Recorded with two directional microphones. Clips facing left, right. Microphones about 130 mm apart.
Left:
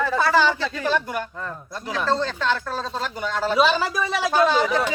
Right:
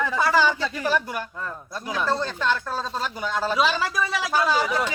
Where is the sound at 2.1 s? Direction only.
15° right (ahead or behind).